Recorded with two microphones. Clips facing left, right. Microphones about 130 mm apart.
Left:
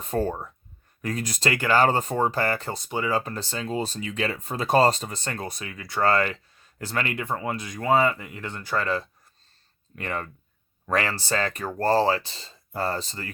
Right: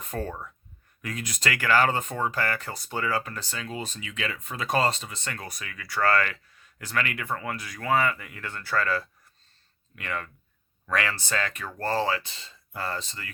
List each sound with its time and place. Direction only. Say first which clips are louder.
0.0 s speech: left 7 dB; 30° left (ahead or behind)
9.9 s speech: left 3 dB; 35° left (ahead or behind)